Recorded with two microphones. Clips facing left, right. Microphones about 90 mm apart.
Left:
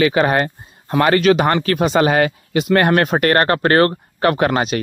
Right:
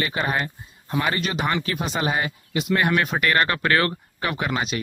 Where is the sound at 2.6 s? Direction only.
55° left (ahead or behind).